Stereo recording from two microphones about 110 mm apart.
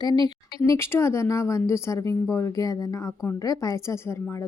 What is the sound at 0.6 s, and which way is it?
A woman's voice, 25° left (ahead or behind).